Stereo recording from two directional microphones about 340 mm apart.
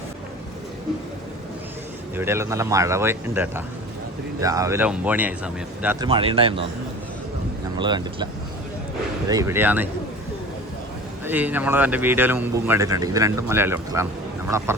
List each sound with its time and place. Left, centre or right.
2.1 s a man's voice: centre
7.8 s a man's voice: centre
9.3 s speech: centre
11.3 s a man's voice: centre